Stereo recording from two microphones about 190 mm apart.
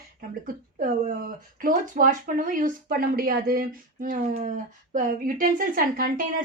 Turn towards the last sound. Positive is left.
turn(degrees=-45)  # may be behind; listen again after turning